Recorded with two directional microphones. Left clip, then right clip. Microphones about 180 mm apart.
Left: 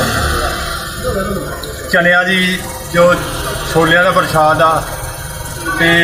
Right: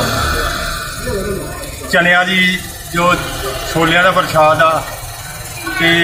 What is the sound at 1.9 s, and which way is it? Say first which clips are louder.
Speech: even; 15° left (ahead or behind).